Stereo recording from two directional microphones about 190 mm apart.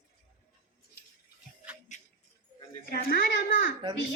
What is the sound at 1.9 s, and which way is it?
Music, 40° left (ahead or behind).